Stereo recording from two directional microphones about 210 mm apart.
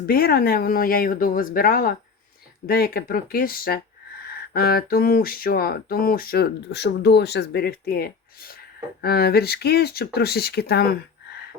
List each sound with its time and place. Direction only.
0.1 s speech: 45° left (ahead or behind)